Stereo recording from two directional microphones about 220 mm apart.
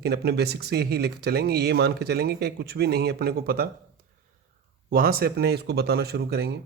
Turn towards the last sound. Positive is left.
turn(degrees=-45)  # may be behind; listen again after turning